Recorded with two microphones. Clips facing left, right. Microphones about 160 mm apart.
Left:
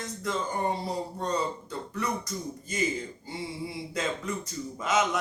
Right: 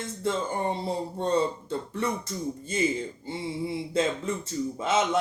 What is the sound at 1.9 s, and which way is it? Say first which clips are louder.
Speech: left 1 dB; 25° right (ahead or behind).